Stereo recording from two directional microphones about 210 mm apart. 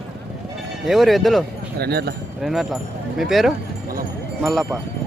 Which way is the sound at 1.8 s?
50° right (ahead or behind).